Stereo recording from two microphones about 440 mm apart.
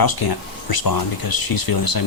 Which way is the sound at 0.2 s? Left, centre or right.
Left.